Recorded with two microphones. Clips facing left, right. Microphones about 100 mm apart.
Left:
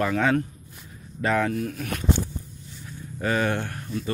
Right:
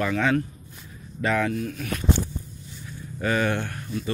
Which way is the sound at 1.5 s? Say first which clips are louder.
Left 1 dB; 40° left (ahead or behind).